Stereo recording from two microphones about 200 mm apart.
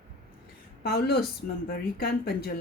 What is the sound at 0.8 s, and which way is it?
Speech, 55° left (ahead or behind).